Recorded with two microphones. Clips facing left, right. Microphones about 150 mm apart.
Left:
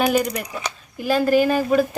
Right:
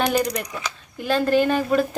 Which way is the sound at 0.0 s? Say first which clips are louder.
Left 2 dB; 5° left (ahead or behind).